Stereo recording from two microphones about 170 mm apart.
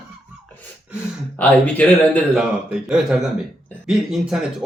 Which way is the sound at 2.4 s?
5° right (ahead or behind).